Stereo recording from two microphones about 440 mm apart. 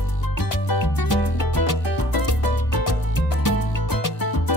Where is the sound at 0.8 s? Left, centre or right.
Left.